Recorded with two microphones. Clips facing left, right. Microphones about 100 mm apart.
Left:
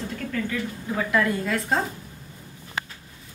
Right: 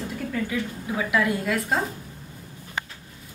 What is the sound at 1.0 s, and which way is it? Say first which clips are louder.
Speech: even; 5° right (ahead or behind).